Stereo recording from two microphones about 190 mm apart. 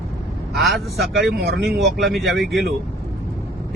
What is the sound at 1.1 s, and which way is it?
Speech, 65° right (ahead or behind).